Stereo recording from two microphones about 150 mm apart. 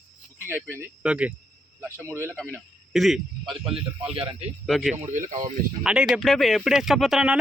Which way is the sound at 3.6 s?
40° right (ahead or behind).